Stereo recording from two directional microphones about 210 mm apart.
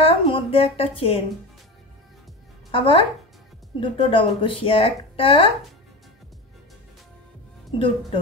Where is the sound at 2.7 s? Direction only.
25° left (ahead or behind).